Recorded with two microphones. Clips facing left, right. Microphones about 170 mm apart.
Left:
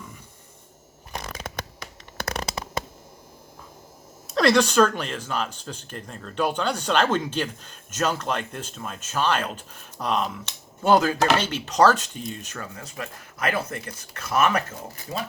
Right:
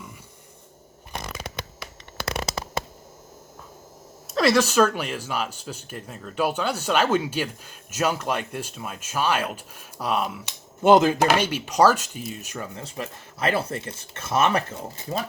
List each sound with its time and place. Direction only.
2.1 s a sound: 50° left (ahead or behind)
4.3 s speech: centre (ahead or behind)
10.9 s speech: 20° right (ahead or behind)
11.2 s speech: 10° right (ahead or behind)
12.7 s speech: 25° right (ahead or behind)